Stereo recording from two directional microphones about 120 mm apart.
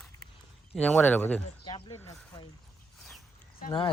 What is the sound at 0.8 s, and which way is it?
Speech, 10° left (ahead or behind).